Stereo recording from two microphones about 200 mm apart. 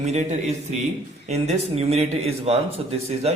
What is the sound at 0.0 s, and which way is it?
A man's voice, 35° right (ahead or behind).